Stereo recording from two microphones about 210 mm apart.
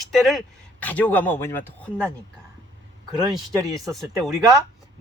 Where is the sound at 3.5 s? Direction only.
15° right (ahead or behind).